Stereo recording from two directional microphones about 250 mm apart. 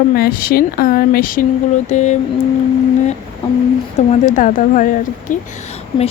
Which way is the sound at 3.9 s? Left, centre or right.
Left.